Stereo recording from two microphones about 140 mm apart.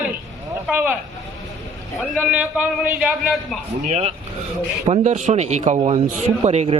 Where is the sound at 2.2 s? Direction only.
10° right (ahead or behind).